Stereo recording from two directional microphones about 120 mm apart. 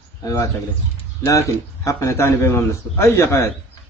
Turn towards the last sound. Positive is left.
turn(degrees=25)  # may be behind; listen again after turning